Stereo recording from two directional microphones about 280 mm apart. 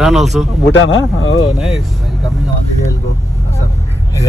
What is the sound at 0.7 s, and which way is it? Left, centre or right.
Speech, left.